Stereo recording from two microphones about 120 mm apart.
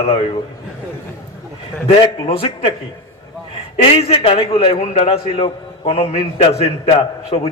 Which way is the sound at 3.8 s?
55° left (ahead or behind).